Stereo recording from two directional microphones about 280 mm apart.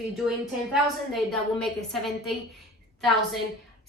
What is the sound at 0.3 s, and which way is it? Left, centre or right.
A woman's voice, centre.